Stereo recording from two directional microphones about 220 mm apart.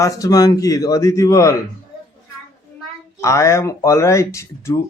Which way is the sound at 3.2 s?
15° left (ahead or behind).